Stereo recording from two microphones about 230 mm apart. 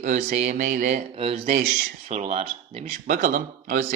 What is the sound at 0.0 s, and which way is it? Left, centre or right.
Speech, right.